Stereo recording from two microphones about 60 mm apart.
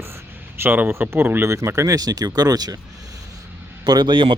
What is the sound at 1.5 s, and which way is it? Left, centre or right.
Speech, right.